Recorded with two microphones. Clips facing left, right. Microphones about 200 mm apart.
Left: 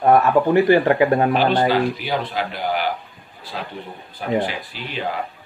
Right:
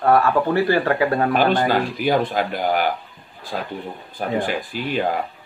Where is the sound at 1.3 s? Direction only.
50° right (ahead or behind).